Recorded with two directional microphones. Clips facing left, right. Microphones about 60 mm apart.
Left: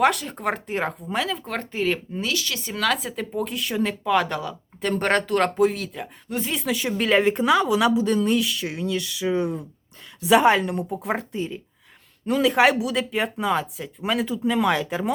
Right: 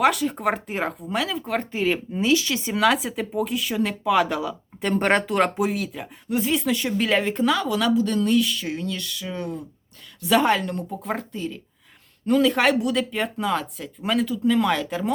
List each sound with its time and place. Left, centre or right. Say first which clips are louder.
0.0 s speech: right 1 dB; centre
2.2 s speech: right 9 dB; right
2.7 s speech: right 3 dB; centre